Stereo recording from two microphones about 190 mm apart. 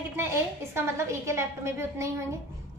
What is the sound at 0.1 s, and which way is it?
A woman's voice, 10° right (ahead or behind).